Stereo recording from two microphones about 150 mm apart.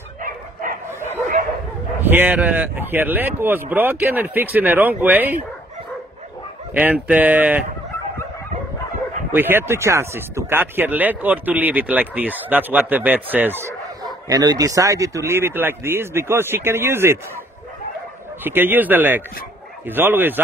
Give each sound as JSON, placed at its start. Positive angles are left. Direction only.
{"t": 0.2, "sound": "bow-wow", "side_deg": -70}
{"t": 2.0, "sound": "speech", "side_deg": -15}
{"t": 6.7, "sound": "speech", "side_deg": -10}
{"t": 9.3, "sound": "speech", "side_deg": -15}
{"t": 14.0, "sound": "speech", "side_deg": -25}
{"t": 18.4, "sound": "speech", "side_deg": -15}